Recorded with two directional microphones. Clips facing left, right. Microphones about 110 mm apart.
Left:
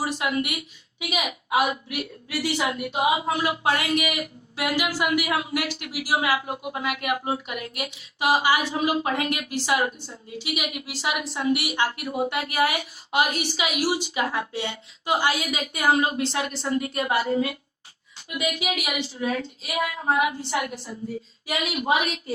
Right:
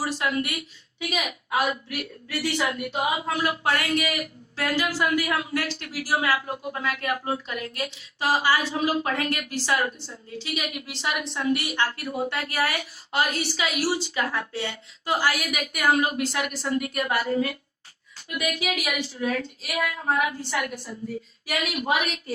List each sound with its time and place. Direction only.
0.0 s a woman's voice: 20° left (ahead or behind)